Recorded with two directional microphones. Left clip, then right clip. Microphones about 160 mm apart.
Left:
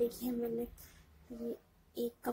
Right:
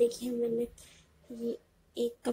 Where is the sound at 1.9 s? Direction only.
10° right (ahead or behind).